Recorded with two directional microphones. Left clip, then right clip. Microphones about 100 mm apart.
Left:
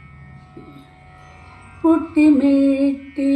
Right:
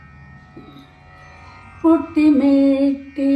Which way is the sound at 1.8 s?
10° right (ahead or behind).